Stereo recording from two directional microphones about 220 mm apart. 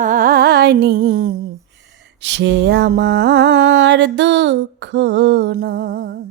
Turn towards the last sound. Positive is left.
turn(degrees=-45)  # may be behind; listen again after turning